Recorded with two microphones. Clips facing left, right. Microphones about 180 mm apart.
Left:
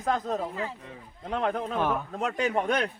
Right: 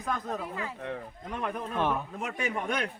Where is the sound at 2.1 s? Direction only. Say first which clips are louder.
Left 5 dB; 70° left (ahead or behind).